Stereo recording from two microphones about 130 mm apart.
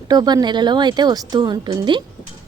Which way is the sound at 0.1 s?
30° right (ahead or behind).